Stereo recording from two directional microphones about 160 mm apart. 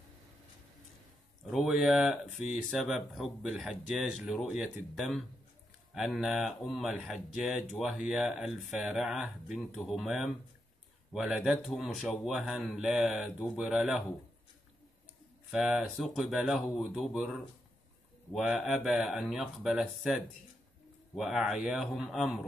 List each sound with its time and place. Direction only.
1.4 s speech: centre (ahead or behind)
15.5 s speech: centre (ahead or behind)